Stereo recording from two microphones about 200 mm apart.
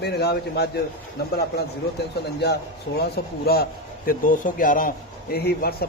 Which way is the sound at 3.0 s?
50° left (ahead or behind).